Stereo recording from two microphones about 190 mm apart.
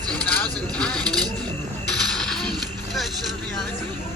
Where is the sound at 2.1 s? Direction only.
Centre (ahead or behind).